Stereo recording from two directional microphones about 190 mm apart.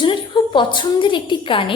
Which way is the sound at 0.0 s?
25° left (ahead or behind).